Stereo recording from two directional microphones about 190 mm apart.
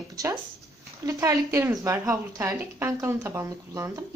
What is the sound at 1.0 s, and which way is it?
A woman's voice, 15° right (ahead or behind).